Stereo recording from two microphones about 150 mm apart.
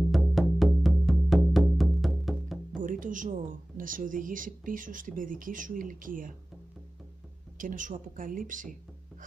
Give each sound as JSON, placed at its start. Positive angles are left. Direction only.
{"t": 0.1, "sound": "music", "side_deg": 0}
{"t": 2.8, "sound": "speech", "side_deg": -65}
{"t": 7.5, "sound": "speech", "side_deg": -60}